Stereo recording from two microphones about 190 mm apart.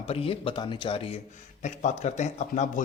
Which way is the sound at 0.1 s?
30° left (ahead or behind).